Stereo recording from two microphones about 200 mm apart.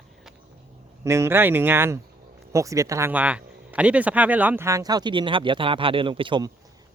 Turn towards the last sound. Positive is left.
turn(degrees=-20)  # may be behind; listen again after turning